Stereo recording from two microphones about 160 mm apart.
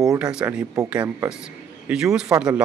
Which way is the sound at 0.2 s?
5° right (ahead or behind).